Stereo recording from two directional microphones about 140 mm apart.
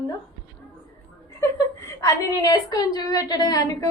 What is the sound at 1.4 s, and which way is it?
A woman's voice, 20° left (ahead or behind).